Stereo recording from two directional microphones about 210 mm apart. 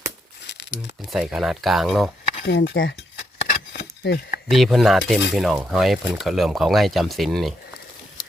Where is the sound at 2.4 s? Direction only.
50° left (ahead or behind).